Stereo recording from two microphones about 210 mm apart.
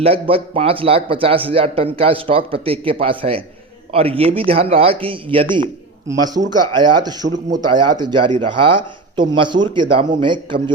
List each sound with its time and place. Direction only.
0.0 s a man's voice: 25° right (ahead or behind)